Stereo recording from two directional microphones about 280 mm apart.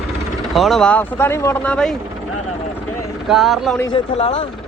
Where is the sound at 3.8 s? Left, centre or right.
Centre.